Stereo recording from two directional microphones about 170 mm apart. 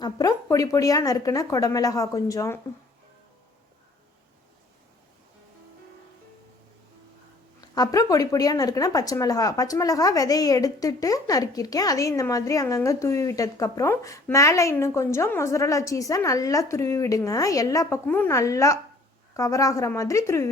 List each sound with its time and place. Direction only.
0.0 s speech: 20° left (ahead or behind)
7.6 s speech: 20° left (ahead or behind)